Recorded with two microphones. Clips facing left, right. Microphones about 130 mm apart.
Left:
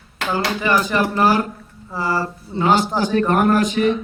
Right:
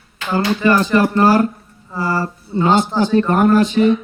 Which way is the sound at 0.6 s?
15° left (ahead or behind).